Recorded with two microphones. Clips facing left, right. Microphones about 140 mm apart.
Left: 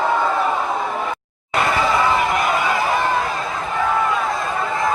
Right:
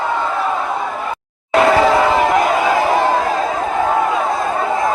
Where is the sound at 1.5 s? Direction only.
90° right; by 2.1 s 70° right (ahead or behind).